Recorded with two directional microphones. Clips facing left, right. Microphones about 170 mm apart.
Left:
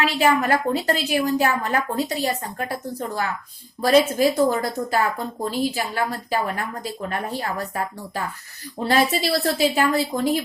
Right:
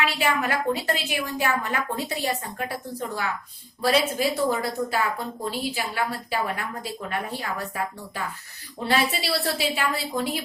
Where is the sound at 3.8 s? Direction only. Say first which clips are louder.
Left 6 dB; 45° left (ahead or behind).